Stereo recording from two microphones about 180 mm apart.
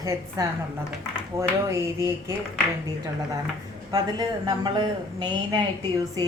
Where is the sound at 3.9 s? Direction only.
20° right (ahead or behind).